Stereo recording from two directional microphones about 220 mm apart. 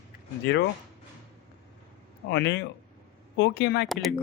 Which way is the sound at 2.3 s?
50° left (ahead or behind).